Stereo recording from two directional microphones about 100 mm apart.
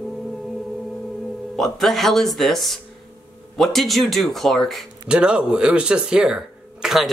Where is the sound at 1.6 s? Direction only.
5° left (ahead or behind).